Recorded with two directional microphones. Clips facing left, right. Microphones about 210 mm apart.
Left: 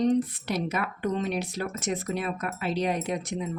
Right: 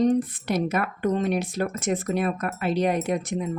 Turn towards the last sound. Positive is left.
turn(degrees=-50)  # may be behind; listen again after turning